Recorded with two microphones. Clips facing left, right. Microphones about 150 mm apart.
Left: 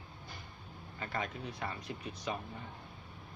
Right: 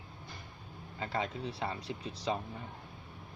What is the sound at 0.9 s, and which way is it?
Speech, 20° right (ahead or behind).